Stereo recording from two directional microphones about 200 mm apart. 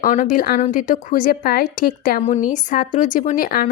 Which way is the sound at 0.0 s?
40° left (ahead or behind).